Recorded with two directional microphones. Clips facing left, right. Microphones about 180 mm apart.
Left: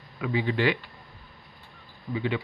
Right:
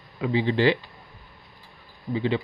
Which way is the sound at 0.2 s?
30° right (ahead or behind).